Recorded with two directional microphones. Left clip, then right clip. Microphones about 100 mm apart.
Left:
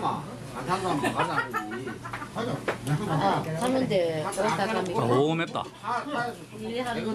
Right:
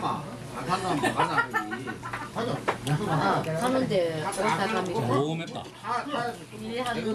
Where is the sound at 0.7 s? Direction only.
15° right (ahead or behind).